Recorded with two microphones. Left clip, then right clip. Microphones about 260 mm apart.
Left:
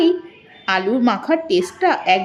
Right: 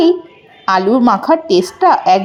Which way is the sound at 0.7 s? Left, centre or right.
Centre.